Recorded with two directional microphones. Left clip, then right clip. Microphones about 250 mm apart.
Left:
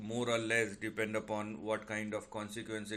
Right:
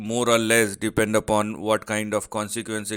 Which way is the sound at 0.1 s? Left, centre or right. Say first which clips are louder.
Right 14 dB; right.